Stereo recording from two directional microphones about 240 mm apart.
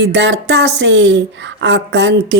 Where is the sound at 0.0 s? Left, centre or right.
Right.